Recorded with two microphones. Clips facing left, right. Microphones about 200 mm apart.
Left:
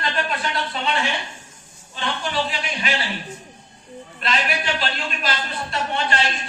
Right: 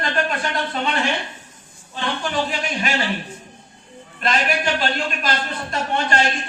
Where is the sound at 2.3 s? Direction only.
45° right (ahead or behind).